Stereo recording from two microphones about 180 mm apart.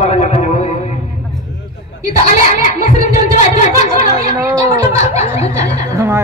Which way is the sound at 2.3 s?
40° left (ahead or behind).